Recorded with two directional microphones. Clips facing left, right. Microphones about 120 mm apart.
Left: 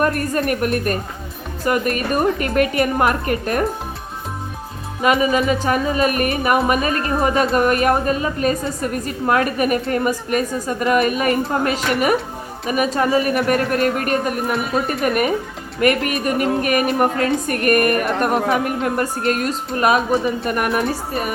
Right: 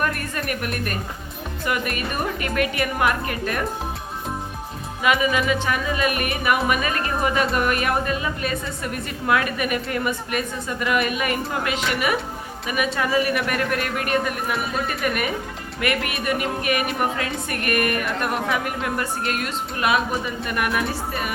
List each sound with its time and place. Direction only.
0.0 s a woman's voice: 40° left (ahead or behind)
5.0 s a woman's voice: 40° left (ahead or behind)